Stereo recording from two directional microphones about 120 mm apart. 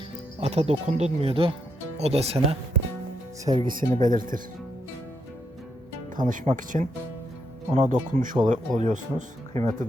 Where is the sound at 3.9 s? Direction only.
90° right.